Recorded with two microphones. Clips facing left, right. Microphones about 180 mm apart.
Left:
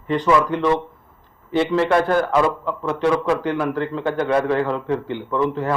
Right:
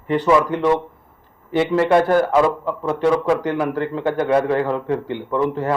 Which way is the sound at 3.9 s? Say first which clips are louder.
Right 3 dB; 10° right (ahead or behind).